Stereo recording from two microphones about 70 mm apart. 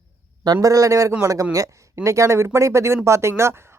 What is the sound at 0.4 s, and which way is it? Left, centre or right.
Speech, right.